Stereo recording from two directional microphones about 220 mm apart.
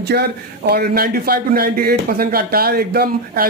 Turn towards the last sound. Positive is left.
turn(degrees=-45)  # may be behind; listen again after turning